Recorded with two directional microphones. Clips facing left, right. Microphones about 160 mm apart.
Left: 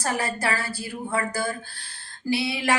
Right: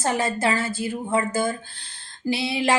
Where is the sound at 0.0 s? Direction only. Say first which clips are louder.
Right 4 dB; 20° right (ahead or behind).